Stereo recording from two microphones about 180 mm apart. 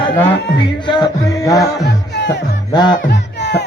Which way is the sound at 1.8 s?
75° left (ahead or behind).